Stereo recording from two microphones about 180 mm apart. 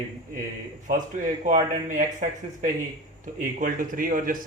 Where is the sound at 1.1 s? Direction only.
45° right (ahead or behind).